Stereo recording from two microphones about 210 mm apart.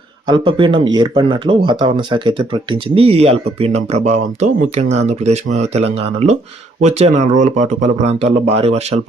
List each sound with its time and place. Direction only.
0.3 s speech: 20° right (ahead or behind)